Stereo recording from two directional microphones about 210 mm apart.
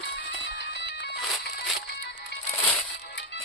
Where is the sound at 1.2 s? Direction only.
Centre (ahead or behind).